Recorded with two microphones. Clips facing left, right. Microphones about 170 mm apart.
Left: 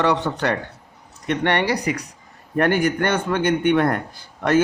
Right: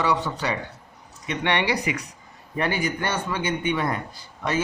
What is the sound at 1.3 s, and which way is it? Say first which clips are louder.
Speech: left 4 dB; 50° left (ahead or behind).